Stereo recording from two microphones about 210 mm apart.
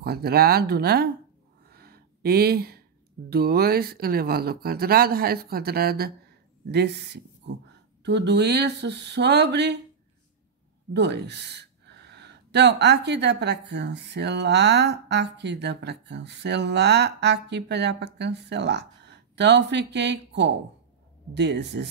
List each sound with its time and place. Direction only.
0.0 s speech: 50° right (ahead or behind)
1.7 s a sound: 45° right (ahead or behind)
3.3 s speech: 45° right (ahead or behind)
10.9 s speech: 55° right (ahead or behind)